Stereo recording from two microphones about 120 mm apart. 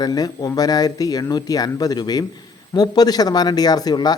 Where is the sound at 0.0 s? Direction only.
35° left (ahead or behind).